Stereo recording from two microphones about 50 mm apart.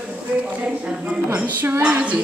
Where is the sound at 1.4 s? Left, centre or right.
Right.